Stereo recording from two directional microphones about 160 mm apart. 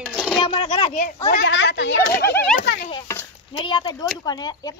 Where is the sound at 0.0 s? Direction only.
Centre (ahead or behind).